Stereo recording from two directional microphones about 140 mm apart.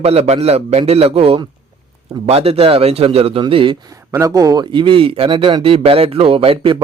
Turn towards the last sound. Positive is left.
turn(degrees=-40)  # may be behind; listen again after turning